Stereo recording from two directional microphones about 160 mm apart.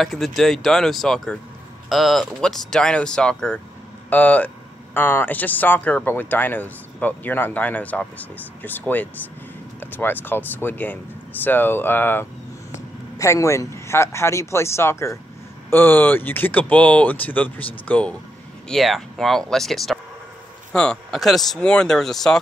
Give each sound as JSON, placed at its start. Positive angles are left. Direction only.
{"t": 0.0, "sound": "speech", "side_deg": 0}